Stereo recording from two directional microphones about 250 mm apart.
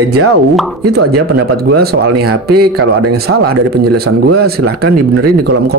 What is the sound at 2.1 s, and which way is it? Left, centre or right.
Speech, right.